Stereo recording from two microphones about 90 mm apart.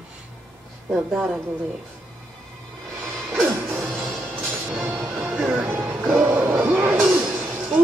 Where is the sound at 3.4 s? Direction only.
25° right (ahead or behind).